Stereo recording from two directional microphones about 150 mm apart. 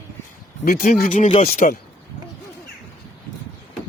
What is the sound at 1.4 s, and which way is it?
Speech, 65° left (ahead or behind).